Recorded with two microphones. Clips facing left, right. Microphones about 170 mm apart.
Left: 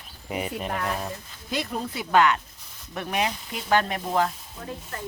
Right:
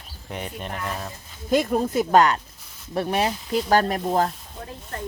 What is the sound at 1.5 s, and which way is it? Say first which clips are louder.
Speech: right 9 dB; 45° right (ahead or behind).